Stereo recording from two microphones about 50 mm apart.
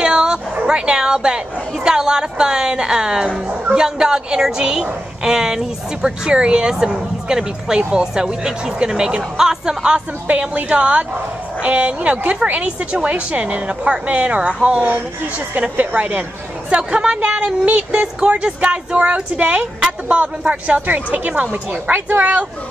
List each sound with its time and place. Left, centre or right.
0.0 s bow-wow: centre
0.7 s a woman's voice: centre
15.5 s a woman's voice: right